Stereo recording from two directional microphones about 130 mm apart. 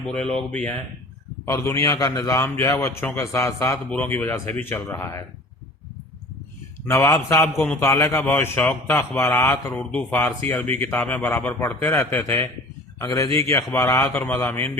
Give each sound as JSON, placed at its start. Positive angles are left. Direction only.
{"t": 0.3, "sound": "a man's voice", "side_deg": 10}
{"t": 1.5, "sound": "a man's voice", "side_deg": 20}
{"t": 3.8, "sound": "a man's voice", "side_deg": 15}
{"t": 6.8, "sound": "a man's voice", "side_deg": 20}
{"t": 7.4, "sound": "a man's voice", "side_deg": 10}
{"t": 7.8, "sound": "a man's voice", "side_deg": 20}